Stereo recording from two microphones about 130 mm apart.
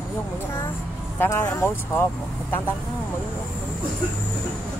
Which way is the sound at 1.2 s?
20° left (ahead or behind).